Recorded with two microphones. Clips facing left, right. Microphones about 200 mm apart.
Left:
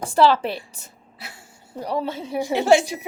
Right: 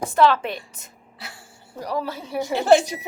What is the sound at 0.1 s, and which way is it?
A woman's voice, 30° left (ahead or behind).